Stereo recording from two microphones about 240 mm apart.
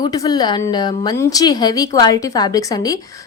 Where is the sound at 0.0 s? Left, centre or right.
Centre.